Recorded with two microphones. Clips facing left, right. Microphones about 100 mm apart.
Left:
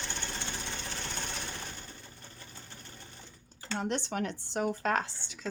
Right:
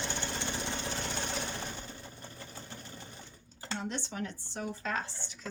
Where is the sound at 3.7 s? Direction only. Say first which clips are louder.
Left 5 dB; 60° left (ahead or behind); by 5.4 s 80° left.